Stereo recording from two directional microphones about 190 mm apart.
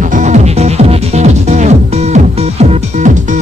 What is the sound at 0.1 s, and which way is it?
Music, 40° right (ahead or behind).